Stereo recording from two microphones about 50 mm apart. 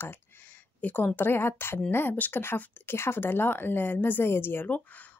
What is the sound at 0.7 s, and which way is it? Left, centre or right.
Speech, left.